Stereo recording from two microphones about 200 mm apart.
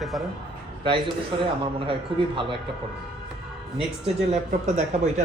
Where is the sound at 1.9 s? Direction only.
25° right (ahead or behind).